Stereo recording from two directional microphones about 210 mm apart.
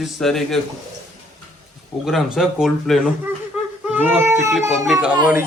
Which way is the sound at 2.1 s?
Centre (ahead or behind).